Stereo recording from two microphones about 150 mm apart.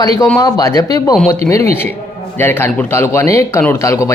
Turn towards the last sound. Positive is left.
turn(degrees=20)  # may be behind; listen again after turning